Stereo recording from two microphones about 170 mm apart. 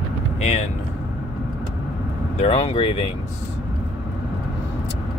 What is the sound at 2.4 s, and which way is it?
Speech, 35° left (ahead or behind).